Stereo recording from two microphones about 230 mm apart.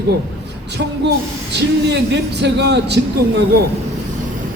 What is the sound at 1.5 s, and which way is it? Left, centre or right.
Speech, right.